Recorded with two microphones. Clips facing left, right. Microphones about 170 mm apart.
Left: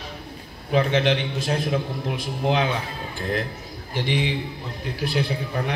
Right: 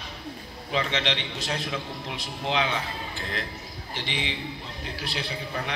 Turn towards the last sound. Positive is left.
turn(degrees=50)  # may be behind; listen again after turning